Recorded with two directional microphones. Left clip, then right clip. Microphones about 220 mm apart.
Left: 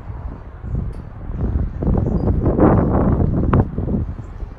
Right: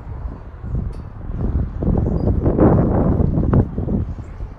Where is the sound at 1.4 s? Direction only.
20° right (ahead or behind).